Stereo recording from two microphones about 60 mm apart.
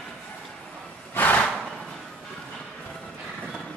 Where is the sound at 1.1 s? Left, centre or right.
Left.